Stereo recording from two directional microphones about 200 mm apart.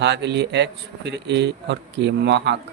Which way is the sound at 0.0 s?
60° right (ahead or behind).